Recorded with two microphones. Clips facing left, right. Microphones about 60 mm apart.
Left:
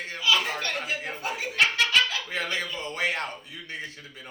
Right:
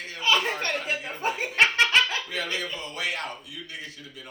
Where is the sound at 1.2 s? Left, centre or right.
Right.